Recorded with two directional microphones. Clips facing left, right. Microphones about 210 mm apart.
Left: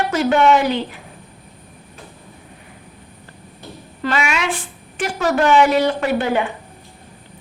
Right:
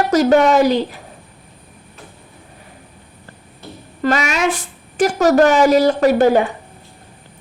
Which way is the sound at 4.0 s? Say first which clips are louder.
Right 4 dB; 40° right (ahead or behind).